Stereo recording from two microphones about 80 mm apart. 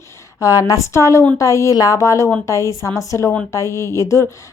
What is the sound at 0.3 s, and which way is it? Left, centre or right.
Speech, left.